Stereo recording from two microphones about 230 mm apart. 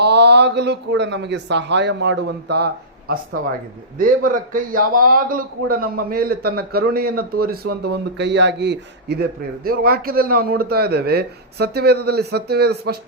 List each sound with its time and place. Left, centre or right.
0.0 s a man's voice: right